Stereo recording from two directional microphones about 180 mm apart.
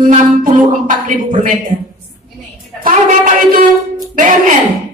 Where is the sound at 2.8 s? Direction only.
45° right (ahead or behind).